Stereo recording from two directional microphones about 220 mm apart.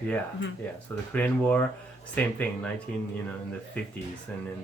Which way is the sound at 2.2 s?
5° left (ahead or behind).